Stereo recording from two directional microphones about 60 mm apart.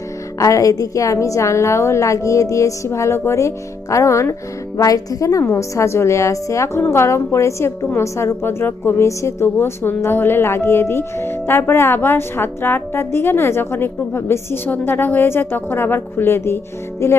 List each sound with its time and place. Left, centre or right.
0.3 s a woman's voice: left
4.8 s a woman's voice: left
6.9 s a woman's voice: left